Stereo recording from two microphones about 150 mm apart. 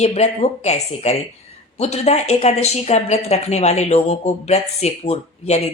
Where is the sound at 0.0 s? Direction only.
45° left (ahead or behind).